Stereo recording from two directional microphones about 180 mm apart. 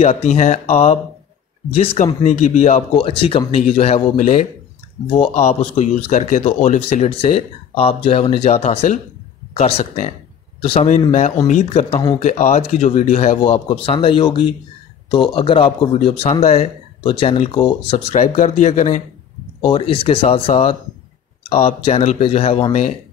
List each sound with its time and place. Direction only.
0.0 s speech: 35° left (ahead or behind)
5.0 s speech: 25° left (ahead or behind)
5.3 s speech: 35° left (ahead or behind)
19.6 s speech: 30° left (ahead or behind)